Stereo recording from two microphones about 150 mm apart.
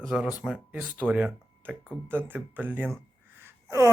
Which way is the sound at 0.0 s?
5° right (ahead or behind).